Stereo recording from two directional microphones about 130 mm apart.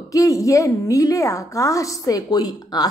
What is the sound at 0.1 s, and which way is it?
A woman's voice, 25° left (ahead or behind).